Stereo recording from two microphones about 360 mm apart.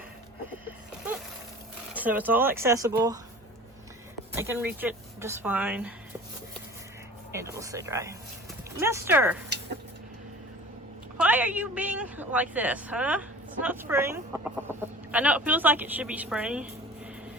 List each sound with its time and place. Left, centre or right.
1.9 s a woman's voice: centre
4.4 s a woman's voice: centre
7.3 s speech: centre
11.2 s a woman's voice: centre